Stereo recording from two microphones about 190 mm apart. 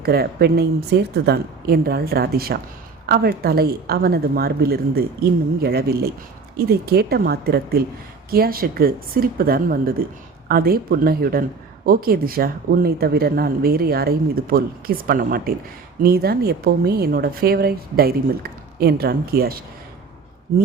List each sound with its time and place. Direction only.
0.0 s a woman's voice: 55° right (ahead or behind)